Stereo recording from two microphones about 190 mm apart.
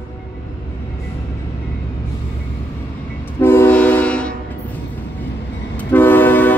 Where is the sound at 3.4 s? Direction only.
10° left (ahead or behind).